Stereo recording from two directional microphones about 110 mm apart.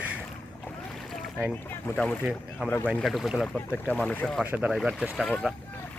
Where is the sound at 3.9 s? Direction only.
10° left (ahead or behind).